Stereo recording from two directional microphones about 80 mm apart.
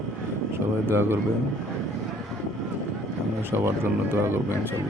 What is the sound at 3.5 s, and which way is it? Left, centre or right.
Speech, right.